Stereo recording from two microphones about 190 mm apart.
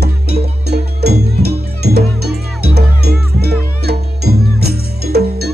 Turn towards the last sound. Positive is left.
turn(degrees=-55)  # may be behind; listen again after turning